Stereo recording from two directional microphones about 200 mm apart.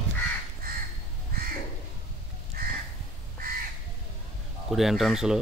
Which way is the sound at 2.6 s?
50° right (ahead or behind).